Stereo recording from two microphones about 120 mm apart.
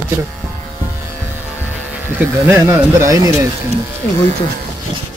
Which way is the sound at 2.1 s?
20° right (ahead or behind).